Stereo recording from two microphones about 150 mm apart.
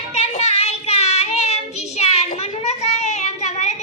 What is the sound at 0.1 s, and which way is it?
Child singing, 45° left (ahead or behind).